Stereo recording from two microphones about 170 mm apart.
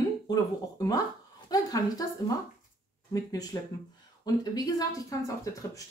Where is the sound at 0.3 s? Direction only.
20° left (ahead or behind).